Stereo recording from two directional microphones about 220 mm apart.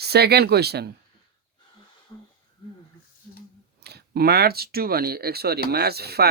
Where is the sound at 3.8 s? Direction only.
45° right (ahead or behind).